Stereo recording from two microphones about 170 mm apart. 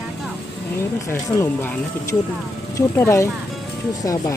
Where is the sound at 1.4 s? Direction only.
15° left (ahead or behind).